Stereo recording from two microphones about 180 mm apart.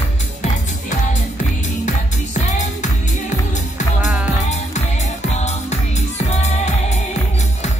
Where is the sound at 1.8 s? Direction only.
40° left (ahead or behind).